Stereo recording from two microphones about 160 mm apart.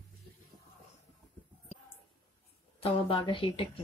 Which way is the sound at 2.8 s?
35° left (ahead or behind).